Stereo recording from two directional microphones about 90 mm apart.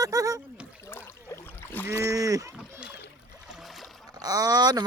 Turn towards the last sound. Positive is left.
turn(degrees=-45)  # may be behind; listen again after turning